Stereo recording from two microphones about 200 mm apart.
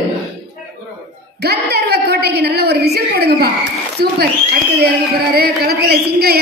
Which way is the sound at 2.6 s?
55° right (ahead or behind).